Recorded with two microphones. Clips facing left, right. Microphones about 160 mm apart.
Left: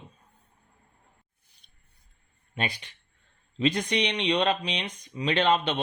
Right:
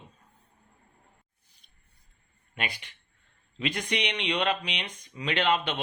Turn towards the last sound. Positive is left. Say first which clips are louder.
# left 3 dB
turn(degrees=20)  # may be behind; listen again after turning